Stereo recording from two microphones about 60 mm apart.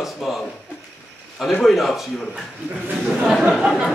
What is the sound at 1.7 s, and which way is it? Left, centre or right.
Speech, centre.